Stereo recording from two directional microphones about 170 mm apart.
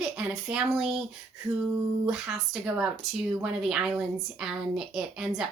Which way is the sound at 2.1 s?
5° right (ahead or behind).